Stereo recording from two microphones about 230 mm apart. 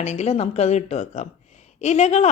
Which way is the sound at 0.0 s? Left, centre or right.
Left.